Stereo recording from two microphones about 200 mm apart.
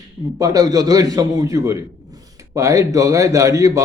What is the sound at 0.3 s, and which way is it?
Speech, 15° right (ahead or behind).